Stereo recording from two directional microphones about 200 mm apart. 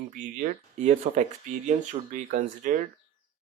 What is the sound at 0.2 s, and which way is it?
Speech, 40° right (ahead or behind).